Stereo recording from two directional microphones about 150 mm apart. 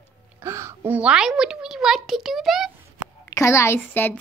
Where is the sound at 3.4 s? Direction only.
20° left (ahead or behind).